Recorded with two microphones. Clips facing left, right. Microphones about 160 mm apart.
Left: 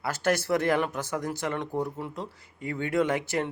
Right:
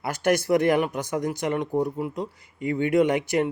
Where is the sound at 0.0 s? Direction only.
15° right (ahead or behind).